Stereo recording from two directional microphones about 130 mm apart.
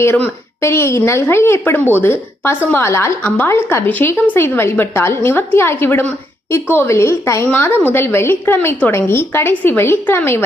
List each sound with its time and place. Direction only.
0.0 s a woman's voice: 15° left (ahead or behind)